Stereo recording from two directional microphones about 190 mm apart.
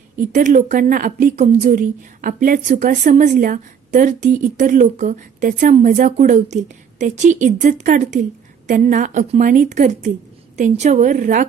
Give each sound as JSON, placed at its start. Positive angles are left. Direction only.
{"t": 0.3, "sound": "a woman's voice", "side_deg": -40}